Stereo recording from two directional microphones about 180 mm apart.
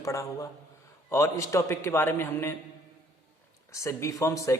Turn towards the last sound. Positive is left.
turn(degrees=15)  # may be behind; listen again after turning